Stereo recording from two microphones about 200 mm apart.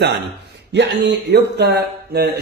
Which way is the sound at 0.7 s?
60° right (ahead or behind).